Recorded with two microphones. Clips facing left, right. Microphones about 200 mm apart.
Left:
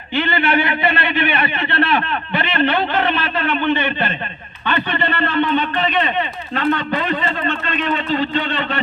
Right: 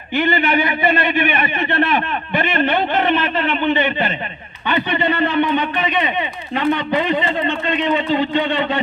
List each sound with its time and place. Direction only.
0.5 s a man's voice: 15° right (ahead or behind)